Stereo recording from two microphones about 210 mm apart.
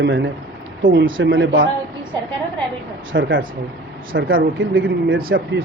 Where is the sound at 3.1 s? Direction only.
65° right (ahead or behind); by 5.6 s 45° right (ahead or behind).